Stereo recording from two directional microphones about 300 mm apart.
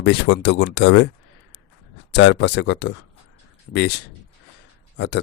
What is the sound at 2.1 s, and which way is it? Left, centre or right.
Speech, left.